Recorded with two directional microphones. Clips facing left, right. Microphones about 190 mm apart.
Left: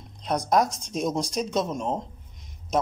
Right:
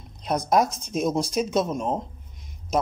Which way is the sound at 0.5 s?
5° right (ahead or behind).